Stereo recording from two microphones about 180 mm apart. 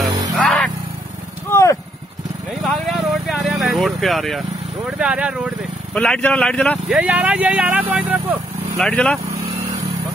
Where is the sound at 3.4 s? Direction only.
Centre (ahead or behind).